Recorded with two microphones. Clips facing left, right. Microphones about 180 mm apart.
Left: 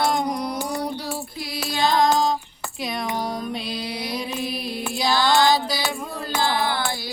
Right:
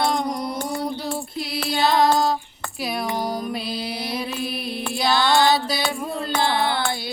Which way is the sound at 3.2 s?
5° right (ahead or behind).